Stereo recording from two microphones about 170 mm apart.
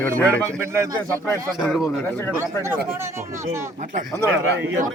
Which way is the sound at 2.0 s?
15° left (ahead or behind).